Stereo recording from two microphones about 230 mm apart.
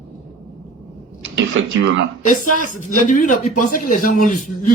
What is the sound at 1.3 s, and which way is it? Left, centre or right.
Speech, right.